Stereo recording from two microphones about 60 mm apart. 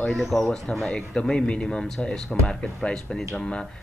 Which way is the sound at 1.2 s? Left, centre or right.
Centre.